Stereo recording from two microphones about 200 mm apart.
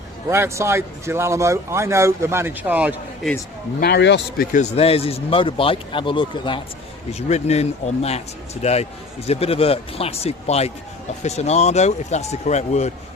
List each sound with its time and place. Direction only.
0.3 s speech: 15° right (ahead or behind)
3.8 s speech: 55° left (ahead or behind)
4.5 s a man's voice: 35° left (ahead or behind)